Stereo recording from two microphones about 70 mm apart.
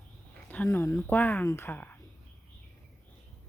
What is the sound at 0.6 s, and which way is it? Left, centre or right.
Speech, left.